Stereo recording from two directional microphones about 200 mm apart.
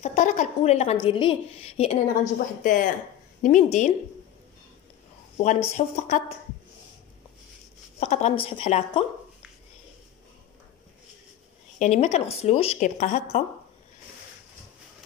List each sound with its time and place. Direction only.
0.0 s a woman's voice: 35° left (ahead or behind)
5.4 s a woman's voice: 35° left (ahead or behind)
8.0 s a woman's voice: 35° left (ahead or behind)
11.8 s a woman's voice: 35° left (ahead or behind)